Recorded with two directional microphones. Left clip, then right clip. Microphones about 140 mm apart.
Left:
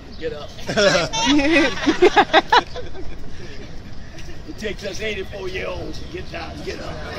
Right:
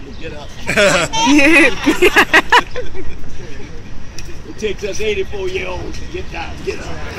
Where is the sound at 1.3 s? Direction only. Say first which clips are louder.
Right 8 dB; 30° right (ahead or behind).